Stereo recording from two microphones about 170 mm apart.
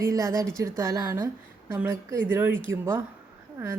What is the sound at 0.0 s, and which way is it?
A woman's voice, 20° right (ahead or behind).